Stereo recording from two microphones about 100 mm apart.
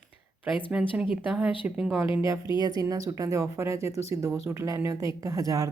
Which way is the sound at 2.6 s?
40° right (ahead or behind).